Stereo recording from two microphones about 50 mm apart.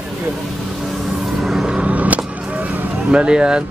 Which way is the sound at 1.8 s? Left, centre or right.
Right.